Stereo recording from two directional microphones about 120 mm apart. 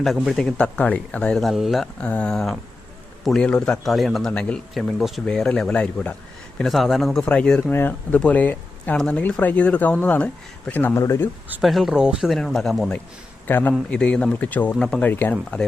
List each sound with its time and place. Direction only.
0.0 s speech: centre (ahead or behind)
6.6 s speech: centre (ahead or behind); by 11.3 s 20° left (ahead or behind)
11.6 s speech: centre (ahead or behind)
13.5 s speech: 15° left (ahead or behind)